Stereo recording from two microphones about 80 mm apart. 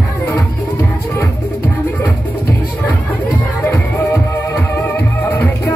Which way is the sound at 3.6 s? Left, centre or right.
Left.